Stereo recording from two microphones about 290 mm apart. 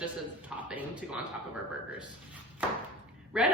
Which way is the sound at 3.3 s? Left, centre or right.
Centre.